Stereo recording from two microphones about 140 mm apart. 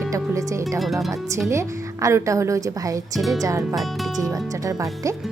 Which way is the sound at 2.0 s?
20° right (ahead or behind).